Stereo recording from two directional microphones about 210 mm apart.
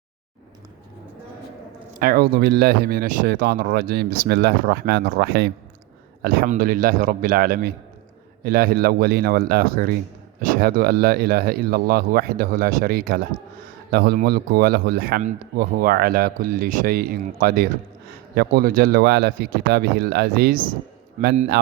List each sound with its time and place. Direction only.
2.0 s a man's voice: 45° right (ahead or behind)